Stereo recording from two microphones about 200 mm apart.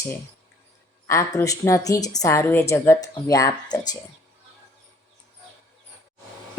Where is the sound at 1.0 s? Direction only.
15° left (ahead or behind).